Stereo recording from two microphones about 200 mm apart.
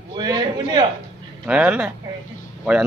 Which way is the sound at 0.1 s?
20° right (ahead or behind).